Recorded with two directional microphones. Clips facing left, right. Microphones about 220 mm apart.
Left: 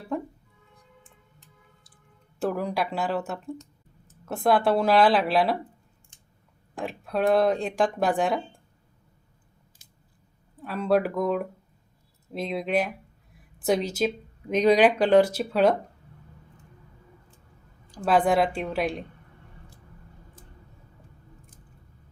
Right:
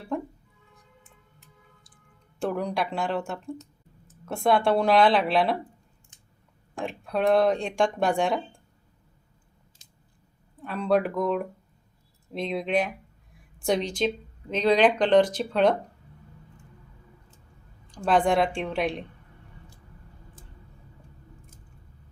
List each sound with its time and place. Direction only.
0.1 s music: centre (ahead or behind)
2.4 s speech: 5° left (ahead or behind)
6.7 s speech: centre (ahead or behind)
10.6 s speech: centre (ahead or behind)
17.9 s speech: 5° left (ahead or behind)